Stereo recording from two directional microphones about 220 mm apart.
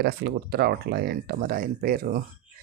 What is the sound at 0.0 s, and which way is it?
Speech, 45° right (ahead or behind).